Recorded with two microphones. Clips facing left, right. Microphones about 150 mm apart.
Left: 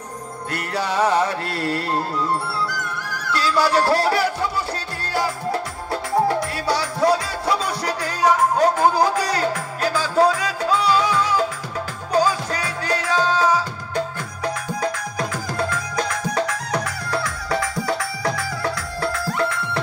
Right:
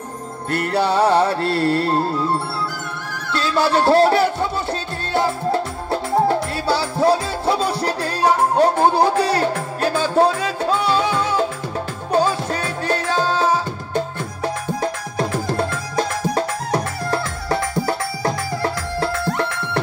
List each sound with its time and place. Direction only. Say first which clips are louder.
0.7 s music: right 4 dB; 30° right (ahead or behind)
9.5 s music: right 2 dB; 55° right (ahead or behind)
10.0 s music: right 1 dB; 30° right (ahead or behind)
10.6 s music: even; 55° right (ahead or behind)
11.0 s music: right 1 dB; 25° right (ahead or behind)